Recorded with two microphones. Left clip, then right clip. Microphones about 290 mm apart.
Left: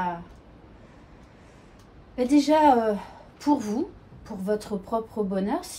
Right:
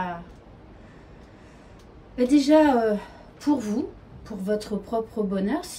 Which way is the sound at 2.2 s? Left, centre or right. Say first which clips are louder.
Right 1 dB; centre.